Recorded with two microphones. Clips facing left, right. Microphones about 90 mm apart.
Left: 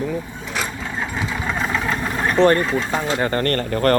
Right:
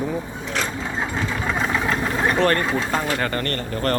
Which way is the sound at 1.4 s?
Centre (ahead or behind).